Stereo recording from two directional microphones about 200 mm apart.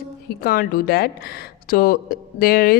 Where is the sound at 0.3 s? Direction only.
50° left (ahead or behind).